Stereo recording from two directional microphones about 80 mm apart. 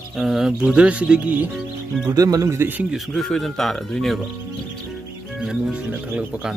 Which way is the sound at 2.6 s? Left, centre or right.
Right.